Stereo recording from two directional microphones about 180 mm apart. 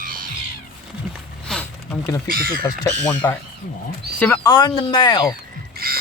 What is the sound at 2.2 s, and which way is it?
Speech, 55° right (ahead or behind).